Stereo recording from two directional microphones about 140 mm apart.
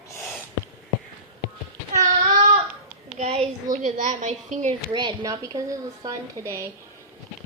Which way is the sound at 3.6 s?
65° right (ahead or behind).